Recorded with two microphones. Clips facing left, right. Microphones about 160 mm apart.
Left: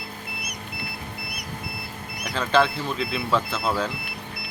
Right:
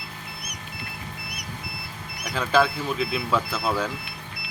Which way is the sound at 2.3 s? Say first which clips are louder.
Even; 5° right (ahead or behind).